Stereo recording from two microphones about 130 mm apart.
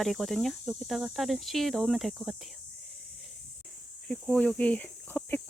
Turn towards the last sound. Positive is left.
turn(degrees=10)  # may be behind; listen again after turning